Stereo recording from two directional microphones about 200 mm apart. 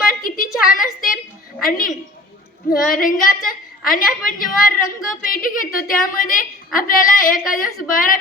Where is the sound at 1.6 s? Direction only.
45° left (ahead or behind).